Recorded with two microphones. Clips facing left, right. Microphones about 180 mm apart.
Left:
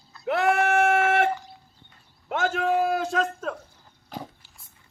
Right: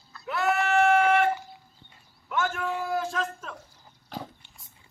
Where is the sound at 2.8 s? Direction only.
65° left (ahead or behind).